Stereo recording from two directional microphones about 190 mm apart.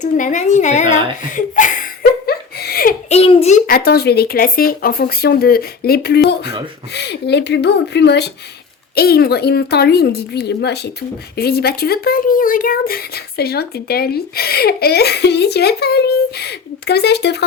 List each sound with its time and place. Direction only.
0.0 s a woman's voice: 40° left (ahead or behind)
1.3 s laughter: 45° left (ahead or behind)
3.1 s a child's voice: 30° left (ahead or behind)
3.7 s speech: 50° left (ahead or behind)